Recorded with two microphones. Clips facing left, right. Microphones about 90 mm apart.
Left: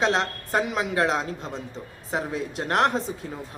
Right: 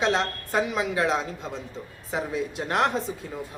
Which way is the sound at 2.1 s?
40° left (ahead or behind).